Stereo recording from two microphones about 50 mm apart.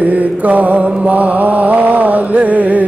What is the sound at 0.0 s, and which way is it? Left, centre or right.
Mantra, right.